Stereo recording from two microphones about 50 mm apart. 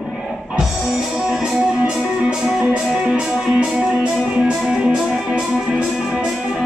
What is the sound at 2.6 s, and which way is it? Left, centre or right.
Music, right.